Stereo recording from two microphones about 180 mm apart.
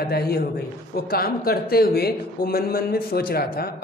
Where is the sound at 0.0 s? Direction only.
60° left (ahead or behind).